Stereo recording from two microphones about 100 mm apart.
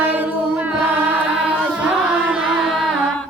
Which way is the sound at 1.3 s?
10° right (ahead or behind).